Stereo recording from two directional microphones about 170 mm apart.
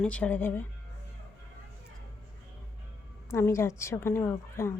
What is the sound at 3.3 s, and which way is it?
Speech, 15° left (ahead or behind).